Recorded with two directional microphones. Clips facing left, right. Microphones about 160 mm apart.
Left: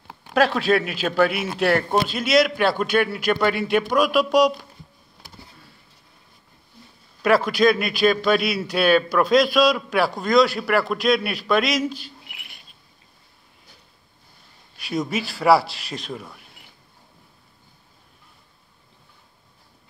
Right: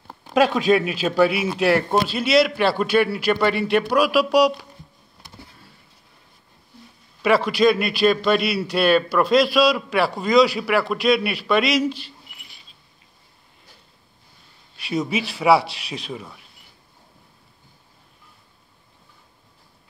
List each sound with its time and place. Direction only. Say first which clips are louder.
0.3 s a man's voice: right 2 dB; 10° right (ahead or behind)
7.2 s a man's voice: even; centre (ahead or behind)
12.3 s cricket: left 3 dB; 65° left (ahead or behind)
14.8 s a man's voice: right 1 dB; centre (ahead or behind)